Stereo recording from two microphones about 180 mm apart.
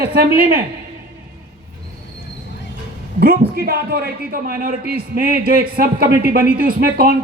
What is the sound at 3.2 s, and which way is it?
A man's voice, 55° right (ahead or behind).